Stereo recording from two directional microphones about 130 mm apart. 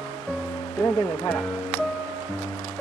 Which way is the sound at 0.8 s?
25° left (ahead or behind).